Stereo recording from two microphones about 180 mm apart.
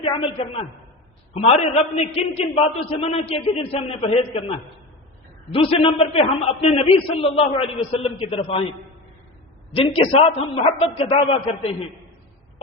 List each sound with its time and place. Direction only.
0.0 s a man's voice: 30° left (ahead or behind)
9.7 s a man's voice: 30° left (ahead or behind)